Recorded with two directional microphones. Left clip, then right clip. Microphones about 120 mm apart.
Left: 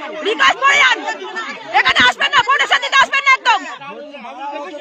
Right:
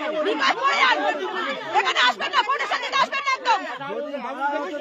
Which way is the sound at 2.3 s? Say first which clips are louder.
Left 9 dB; 55° left (ahead or behind).